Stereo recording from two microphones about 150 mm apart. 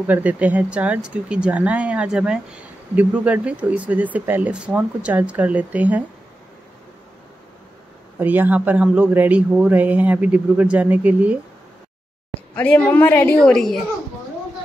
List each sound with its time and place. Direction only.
0.0 s speech: 10° right (ahead or behind)
8.2 s speech: 10° right (ahead or behind)
12.5 s a woman's voice: 10° left (ahead or behind)